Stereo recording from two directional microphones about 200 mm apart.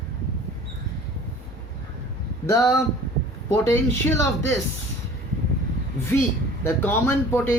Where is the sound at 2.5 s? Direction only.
15° left (ahead or behind).